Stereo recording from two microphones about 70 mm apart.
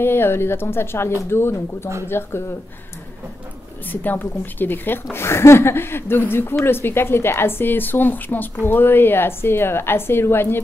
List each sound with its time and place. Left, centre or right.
0.0 s a woman's voice: left
3.8 s a woman's voice: left